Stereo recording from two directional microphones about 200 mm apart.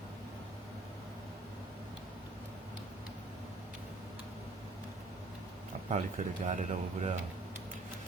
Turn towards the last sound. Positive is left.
turn(degrees=-40)  # may be behind; listen again after turning